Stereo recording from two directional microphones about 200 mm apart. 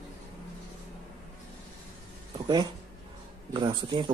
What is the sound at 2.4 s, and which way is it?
A man's voice, 20° right (ahead or behind).